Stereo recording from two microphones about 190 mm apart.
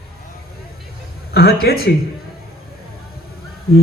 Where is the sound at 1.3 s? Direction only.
55° left (ahead or behind).